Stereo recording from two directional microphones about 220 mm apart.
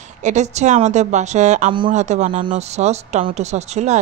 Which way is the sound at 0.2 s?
30° right (ahead or behind).